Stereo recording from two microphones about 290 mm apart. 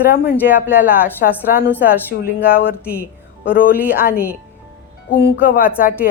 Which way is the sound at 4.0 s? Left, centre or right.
Left.